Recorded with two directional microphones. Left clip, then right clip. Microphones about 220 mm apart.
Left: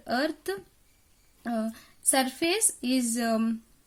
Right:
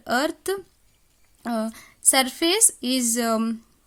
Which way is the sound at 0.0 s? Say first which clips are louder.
Right 5 dB; 40° right (ahead or behind).